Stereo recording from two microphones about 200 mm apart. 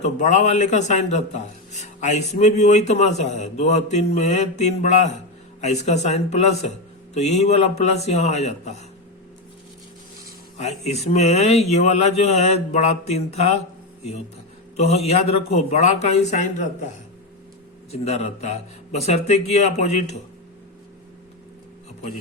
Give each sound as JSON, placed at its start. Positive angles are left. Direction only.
{"t": 0.0, "sound": "a man's voice", "side_deg": 35}
{"t": 10.6, "sound": "a man's voice", "side_deg": 35}
{"t": 14.8, "sound": "a man's voice", "side_deg": 30}
{"t": 17.9, "sound": "a man's voice", "side_deg": 30}